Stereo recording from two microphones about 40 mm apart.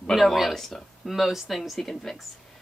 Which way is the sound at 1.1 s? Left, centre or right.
Centre.